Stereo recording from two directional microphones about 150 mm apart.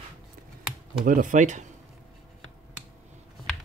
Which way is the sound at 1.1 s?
60° right (ahead or behind).